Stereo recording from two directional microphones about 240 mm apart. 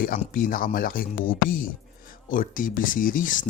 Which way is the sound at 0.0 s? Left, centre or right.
Left.